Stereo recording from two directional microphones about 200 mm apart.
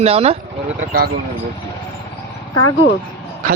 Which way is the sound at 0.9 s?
50° right (ahead or behind).